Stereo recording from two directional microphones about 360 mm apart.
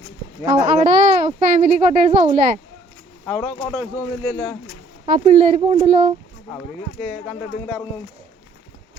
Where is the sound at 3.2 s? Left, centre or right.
Centre.